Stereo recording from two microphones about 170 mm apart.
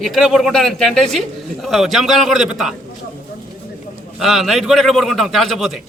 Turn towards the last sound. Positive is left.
turn(degrees=0)  # may be behind; listen again after turning